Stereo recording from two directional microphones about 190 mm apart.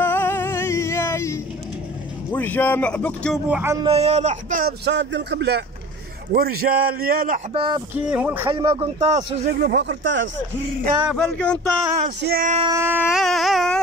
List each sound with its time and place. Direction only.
0.0 s music: 10° left (ahead or behind)
2.3 s speech: 10° left (ahead or behind)
3.4 s speech: 5° right (ahead or behind)
3.7 s a man's voice: 30° right (ahead or behind); by 7.3 s 50° right (ahead or behind)
7.5 s speech: 25° right (ahead or behind)
8.1 s speech: 10° right (ahead or behind)
8.5 s speech: 20° right (ahead or behind)
8.8 s a man's voice: 30° right (ahead or behind)
9.5 s speech: 60° right (ahead or behind)
11.1 s speech: 5° left (ahead or behind)
12.2 s speech: 55° right (ahead or behind)
12.6 s speech: 15° right (ahead or behind)
13.1 s speech: centre (ahead or behind)